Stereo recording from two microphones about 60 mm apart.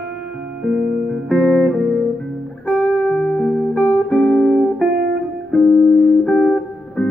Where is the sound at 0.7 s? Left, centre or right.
Centre.